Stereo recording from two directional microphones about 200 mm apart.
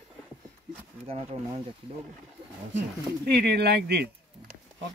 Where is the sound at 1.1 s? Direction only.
30° right (ahead or behind).